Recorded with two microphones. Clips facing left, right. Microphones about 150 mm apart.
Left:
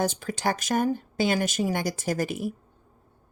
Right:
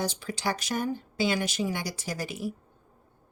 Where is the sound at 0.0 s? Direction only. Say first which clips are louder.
Left 4 dB; 50° left (ahead or behind).